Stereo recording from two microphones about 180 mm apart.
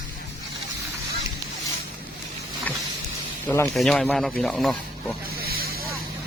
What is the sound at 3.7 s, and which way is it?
Speech, centre (ahead or behind).